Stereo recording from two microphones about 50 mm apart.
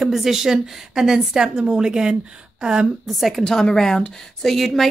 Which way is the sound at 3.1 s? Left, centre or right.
Centre.